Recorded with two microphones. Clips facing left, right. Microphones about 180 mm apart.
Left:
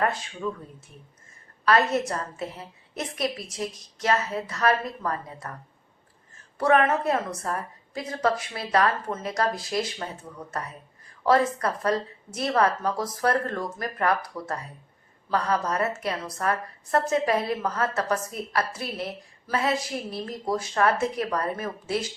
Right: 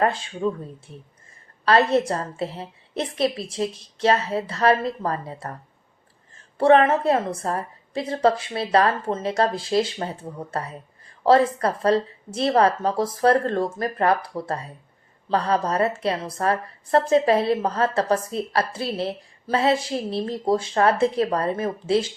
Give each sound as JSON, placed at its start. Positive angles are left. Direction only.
{"t": 0.0, "sound": "a woman's voice", "side_deg": -30}
{"t": 1.6, "sound": "a woman's voice", "side_deg": -30}